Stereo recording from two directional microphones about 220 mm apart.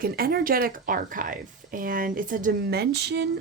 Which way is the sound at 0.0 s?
45° right (ahead or behind).